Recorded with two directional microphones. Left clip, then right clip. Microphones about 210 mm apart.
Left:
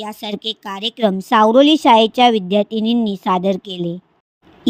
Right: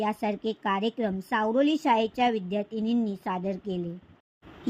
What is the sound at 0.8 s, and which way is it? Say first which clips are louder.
A woman's voice: left 11 dB; 35° left (ahead or behind).